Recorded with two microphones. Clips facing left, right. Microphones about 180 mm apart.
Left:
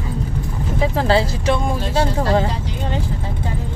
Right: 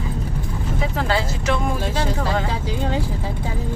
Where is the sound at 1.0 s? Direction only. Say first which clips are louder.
Left 6 dB; 30° left (ahead or behind).